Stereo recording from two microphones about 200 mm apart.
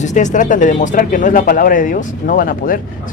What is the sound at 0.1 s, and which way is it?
Speech, 35° left (ahead or behind).